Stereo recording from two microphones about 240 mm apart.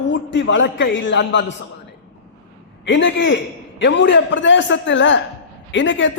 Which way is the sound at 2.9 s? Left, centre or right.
Left.